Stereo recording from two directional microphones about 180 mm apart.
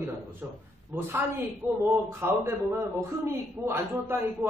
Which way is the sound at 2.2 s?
15° right (ahead or behind).